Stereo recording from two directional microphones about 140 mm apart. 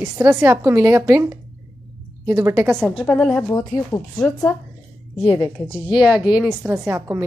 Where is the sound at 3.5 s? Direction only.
25° left (ahead or behind).